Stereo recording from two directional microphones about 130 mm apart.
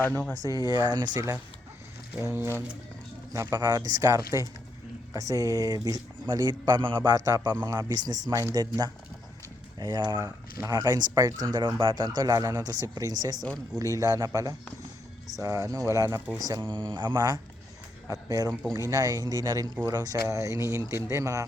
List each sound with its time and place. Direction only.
0.0 s speech: 15° left (ahead or behind)
0.4 s speech: 30° right (ahead or behind)
2.2 s speech: 20° right (ahead or behind)
11.5 s speech: 40° right (ahead or behind); by 16.4 s 15° right (ahead or behind)
16.4 s speech: 30° right (ahead or behind)